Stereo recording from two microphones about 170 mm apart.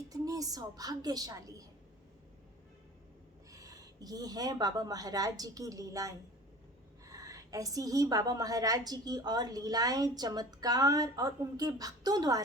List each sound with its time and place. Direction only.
0.1 s a woman's voice: 20° right (ahead or behind)
3.5 s a woman's voice: 20° right (ahead or behind)